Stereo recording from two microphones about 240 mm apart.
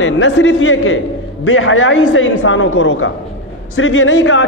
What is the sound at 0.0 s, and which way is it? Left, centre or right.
A man's voice, left.